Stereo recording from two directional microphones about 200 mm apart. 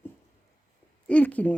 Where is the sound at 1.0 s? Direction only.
5° left (ahead or behind).